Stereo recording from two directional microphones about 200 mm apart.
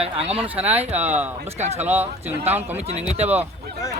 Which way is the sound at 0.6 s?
10° right (ahead or behind).